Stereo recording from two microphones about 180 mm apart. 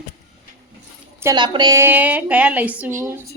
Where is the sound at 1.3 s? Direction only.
25° right (ahead or behind).